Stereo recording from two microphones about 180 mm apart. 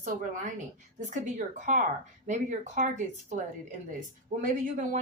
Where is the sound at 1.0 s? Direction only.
40° right (ahead or behind).